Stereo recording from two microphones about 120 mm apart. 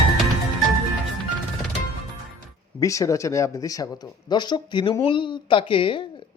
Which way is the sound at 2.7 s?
30° left (ahead or behind).